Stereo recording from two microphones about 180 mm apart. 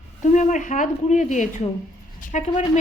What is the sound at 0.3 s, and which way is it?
A woman's voice, 40° left (ahead or behind).